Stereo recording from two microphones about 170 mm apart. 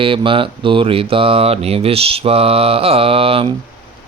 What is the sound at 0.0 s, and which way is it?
Mantra, 30° right (ahead or behind).